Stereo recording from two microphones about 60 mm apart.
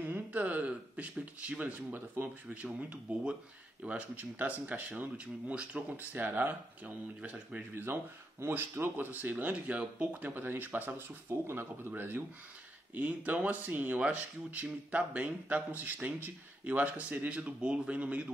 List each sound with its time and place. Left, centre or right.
0.0 s speech: right
7.2 s speech: centre
7.7 s speech: right